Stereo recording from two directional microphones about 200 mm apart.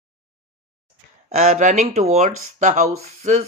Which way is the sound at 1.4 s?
35° right (ahead or behind).